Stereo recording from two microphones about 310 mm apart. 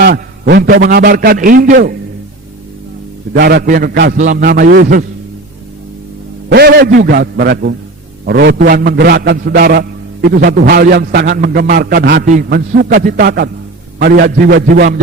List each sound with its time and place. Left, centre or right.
0.0 s a man's voice: right
3.3 s a man's voice: right
6.5 s a man's voice: right